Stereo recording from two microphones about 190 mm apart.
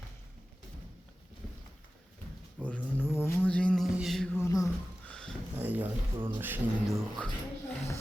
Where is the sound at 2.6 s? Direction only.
10° left (ahead or behind).